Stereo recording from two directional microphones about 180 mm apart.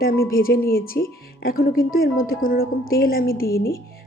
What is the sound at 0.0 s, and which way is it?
Speech, 55° left (ahead or behind).